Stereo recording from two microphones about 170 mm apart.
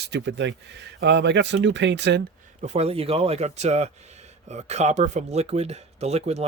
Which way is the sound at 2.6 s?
40° right (ahead or behind).